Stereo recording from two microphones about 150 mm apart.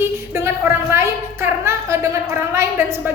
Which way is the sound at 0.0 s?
15° right (ahead or behind).